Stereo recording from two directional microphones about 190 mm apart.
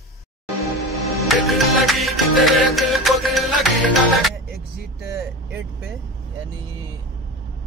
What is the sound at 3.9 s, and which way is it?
Vehicle, centre (ahead or behind).